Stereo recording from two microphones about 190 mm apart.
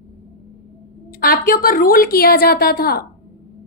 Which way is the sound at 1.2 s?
50° left (ahead or behind).